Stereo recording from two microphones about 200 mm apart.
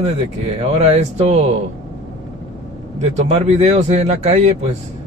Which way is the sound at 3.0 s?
35° right (ahead or behind).